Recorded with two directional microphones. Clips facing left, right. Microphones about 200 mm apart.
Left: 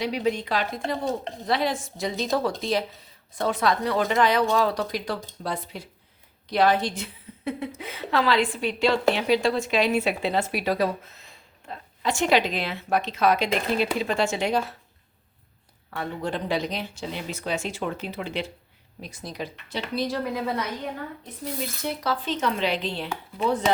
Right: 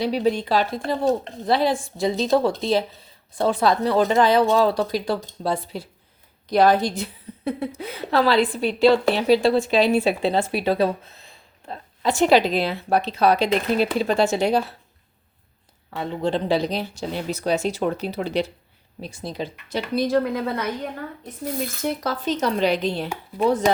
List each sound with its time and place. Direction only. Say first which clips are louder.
0.0 s a woman's voice: right 4 dB; 35° right (ahead or behind)
15.9 s a woman's voice: right 6 dB; 25° right (ahead or behind)
19.6 s speech: right 5 dB; 45° right (ahead or behind)
21.8 s a woman's voice: right 3 dB; 45° right (ahead or behind)